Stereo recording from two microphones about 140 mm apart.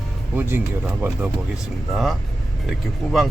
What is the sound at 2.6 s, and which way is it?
Speech, centre (ahead or behind).